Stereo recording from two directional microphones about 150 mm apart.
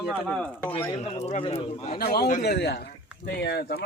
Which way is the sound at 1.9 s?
85° left.